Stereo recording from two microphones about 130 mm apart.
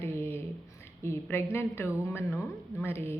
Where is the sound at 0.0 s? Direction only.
20° left (ahead or behind).